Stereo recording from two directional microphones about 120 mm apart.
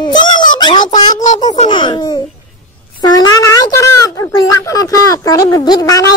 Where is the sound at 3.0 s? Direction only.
30° left (ahead or behind).